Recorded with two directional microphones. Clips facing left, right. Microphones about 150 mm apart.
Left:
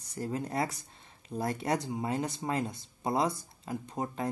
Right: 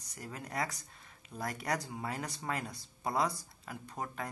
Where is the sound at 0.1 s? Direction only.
30° left (ahead or behind).